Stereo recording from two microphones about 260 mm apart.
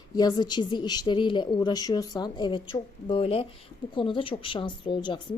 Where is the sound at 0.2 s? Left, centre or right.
Centre.